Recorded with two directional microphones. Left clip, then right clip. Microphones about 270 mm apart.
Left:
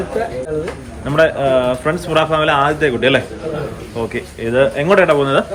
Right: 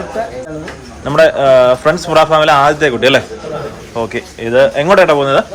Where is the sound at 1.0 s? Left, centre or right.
Centre.